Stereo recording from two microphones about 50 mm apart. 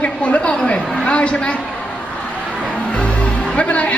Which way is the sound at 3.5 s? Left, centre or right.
Left.